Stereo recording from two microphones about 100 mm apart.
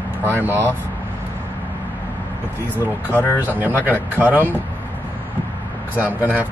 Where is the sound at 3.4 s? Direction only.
15° right (ahead or behind).